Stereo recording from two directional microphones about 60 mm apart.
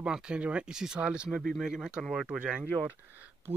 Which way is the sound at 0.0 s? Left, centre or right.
Centre.